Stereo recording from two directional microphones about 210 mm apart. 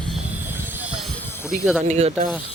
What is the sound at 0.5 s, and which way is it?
Music, 10° right (ahead or behind).